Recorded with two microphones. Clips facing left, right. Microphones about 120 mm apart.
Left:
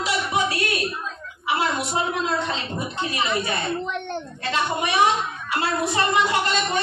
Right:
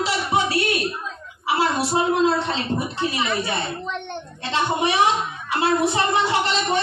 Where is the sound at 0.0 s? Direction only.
30° right (ahead or behind).